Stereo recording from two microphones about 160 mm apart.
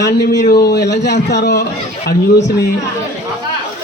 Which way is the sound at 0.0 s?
80° left.